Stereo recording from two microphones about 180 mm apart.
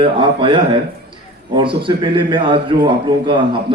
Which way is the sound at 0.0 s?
30° right (ahead or behind).